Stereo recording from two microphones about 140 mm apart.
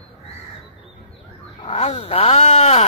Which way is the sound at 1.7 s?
45° left (ahead or behind).